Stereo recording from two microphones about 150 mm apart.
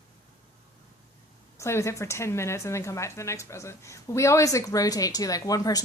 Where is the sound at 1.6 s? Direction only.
20° left (ahead or behind).